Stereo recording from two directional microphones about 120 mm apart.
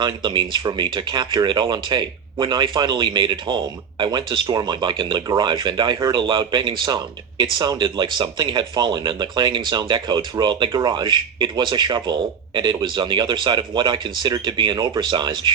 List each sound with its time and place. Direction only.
0.0 s speech: 40° right (ahead or behind)